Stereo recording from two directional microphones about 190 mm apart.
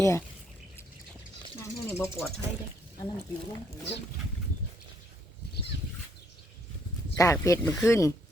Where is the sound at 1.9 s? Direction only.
15° left (ahead or behind).